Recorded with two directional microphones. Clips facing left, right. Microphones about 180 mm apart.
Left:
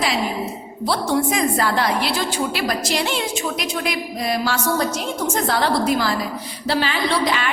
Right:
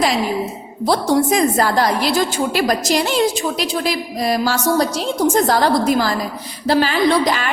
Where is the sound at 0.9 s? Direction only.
40° right (ahead or behind).